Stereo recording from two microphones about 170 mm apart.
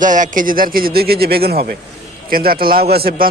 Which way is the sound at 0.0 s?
50° right (ahead or behind).